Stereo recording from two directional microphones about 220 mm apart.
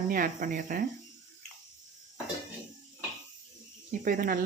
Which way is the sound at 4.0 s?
40° right (ahead or behind).